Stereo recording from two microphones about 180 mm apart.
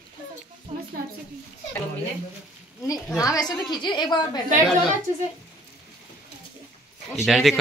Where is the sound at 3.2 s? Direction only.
20° left (ahead or behind).